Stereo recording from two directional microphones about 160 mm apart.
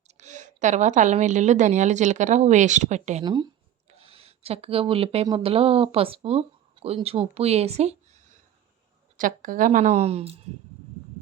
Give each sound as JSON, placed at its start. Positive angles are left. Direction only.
{"t": 0.1, "sound": "a woman's voice", "side_deg": -45}
{"t": 3.2, "sound": "speech", "side_deg": -25}
{"t": 9.1, "sound": "a woman's voice", "side_deg": -55}